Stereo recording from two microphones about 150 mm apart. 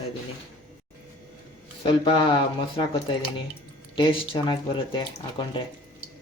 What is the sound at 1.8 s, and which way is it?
Speech, 35° left (ahead or behind).